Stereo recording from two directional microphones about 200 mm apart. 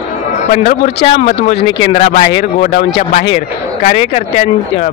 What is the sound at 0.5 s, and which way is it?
Speech, 35° left (ahead or behind).